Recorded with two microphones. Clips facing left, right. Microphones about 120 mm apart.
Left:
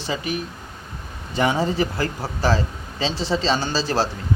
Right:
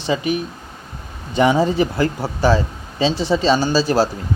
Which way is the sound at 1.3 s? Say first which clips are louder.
Right 5 dB; 20° right (ahead or behind).